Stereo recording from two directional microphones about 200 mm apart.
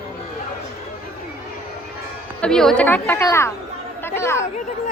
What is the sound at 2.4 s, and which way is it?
Speech, 5° left (ahead or behind).